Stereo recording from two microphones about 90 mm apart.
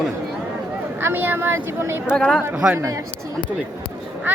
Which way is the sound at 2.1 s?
5° left (ahead or behind).